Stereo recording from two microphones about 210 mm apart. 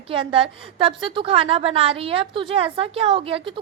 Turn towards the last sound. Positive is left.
turn(degrees=-25)  # may be behind; listen again after turning